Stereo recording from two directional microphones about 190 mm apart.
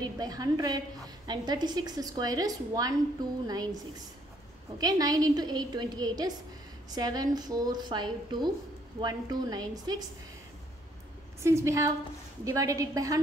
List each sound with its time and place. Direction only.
0.2 s speech: 20° right (ahead or behind)
11.4 s a woman's voice: 15° right (ahead or behind)